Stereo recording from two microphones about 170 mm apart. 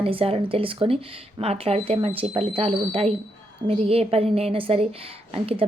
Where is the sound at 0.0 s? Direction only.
35° right (ahead or behind).